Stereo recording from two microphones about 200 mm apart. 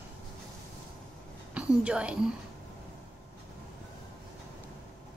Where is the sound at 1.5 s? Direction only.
5° right (ahead or behind).